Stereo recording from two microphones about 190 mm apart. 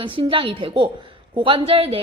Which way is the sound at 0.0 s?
30° right (ahead or behind).